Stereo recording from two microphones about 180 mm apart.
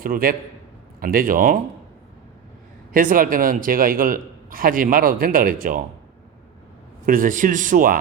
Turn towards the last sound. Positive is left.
turn(degrees=-50)  # may be behind; listen again after turning